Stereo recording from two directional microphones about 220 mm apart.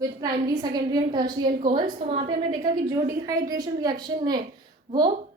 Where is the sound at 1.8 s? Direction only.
35° right (ahead or behind).